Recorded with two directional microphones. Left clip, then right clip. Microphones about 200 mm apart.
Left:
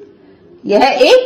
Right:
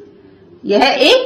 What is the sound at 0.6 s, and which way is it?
Speech, 15° left (ahead or behind).